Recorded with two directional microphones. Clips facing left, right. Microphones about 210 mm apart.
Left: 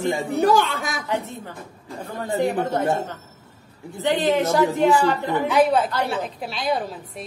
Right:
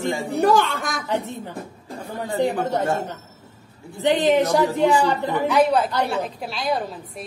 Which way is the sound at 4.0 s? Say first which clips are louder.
Right 2 dB; 20° right (ahead or behind).